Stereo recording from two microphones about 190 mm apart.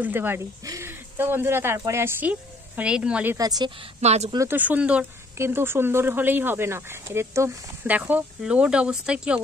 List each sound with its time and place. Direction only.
0.0 s speech: 10° right (ahead or behind)
3.3 s a woman's voice: 20° right (ahead or behind)
4.0 s speech: 35° right (ahead or behind)
4.4 s speech: 10° right (ahead or behind)